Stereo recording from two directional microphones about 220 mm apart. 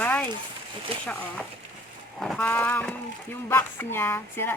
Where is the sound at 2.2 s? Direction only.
5° left (ahead or behind).